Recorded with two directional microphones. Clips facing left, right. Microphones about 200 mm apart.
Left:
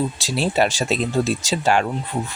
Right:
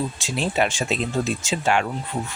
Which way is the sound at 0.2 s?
35° left (ahead or behind).